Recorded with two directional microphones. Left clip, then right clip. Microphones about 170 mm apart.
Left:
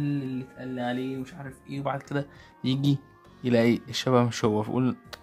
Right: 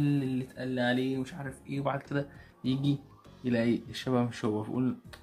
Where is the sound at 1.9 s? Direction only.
40° left (ahead or behind).